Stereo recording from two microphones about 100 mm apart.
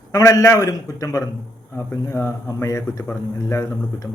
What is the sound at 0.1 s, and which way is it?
A man's voice, 35° left (ahead or behind).